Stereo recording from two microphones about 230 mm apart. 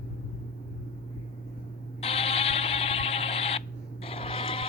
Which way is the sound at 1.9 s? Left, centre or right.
Left.